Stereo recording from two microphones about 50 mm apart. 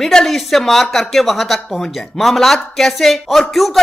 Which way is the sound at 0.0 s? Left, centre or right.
Centre.